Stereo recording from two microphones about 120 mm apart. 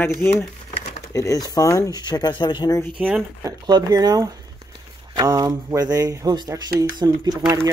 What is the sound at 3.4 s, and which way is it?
Speech, 35° right (ahead or behind).